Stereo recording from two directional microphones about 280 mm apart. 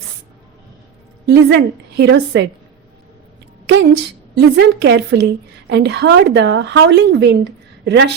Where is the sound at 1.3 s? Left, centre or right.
Right.